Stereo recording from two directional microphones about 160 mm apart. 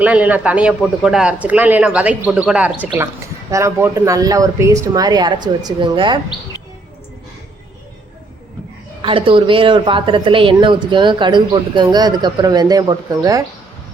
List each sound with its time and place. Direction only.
0.0 s a woman's voice: 10° right (ahead or behind); by 6.1 s 30° right (ahead or behind)
9.0 s a woman's voice: 35° right (ahead or behind)